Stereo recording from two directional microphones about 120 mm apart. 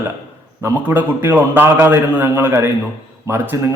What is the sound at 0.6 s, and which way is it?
A man's voice, 20° right (ahead or behind).